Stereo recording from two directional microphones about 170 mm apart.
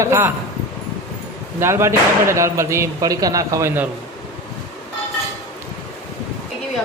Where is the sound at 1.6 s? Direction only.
15° right (ahead or behind).